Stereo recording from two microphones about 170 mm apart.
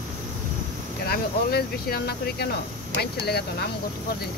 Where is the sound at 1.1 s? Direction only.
65° left (ahead or behind).